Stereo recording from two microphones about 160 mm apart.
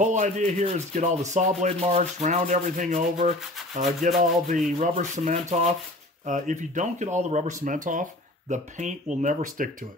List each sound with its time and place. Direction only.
0.0 s rub: 50° right (ahead or behind)